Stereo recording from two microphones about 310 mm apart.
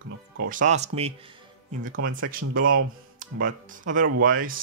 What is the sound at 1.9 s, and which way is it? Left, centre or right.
Speech, right.